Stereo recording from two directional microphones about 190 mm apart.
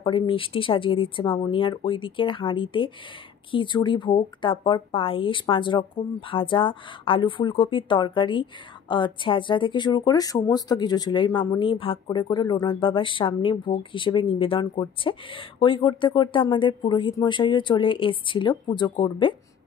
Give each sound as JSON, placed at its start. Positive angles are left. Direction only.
{"t": 0.0, "sound": "speech", "side_deg": 25}